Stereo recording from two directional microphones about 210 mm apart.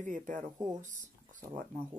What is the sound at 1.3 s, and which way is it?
Speech, 40° right (ahead or behind).